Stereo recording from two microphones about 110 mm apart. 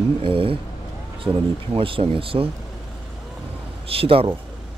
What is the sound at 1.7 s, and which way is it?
Speech, 55° right (ahead or behind).